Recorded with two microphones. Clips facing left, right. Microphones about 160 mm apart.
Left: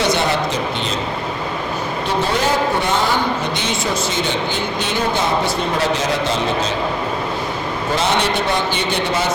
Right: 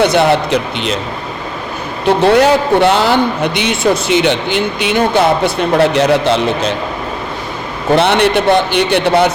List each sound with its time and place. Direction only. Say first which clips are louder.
0.0 s a man's voice: right 7 dB; 60° right (ahead or behind)
2.0 s a man's voice: right 11 dB; 65° right (ahead or behind)
7.9 s a man's voice: right 8 dB; 65° right (ahead or behind)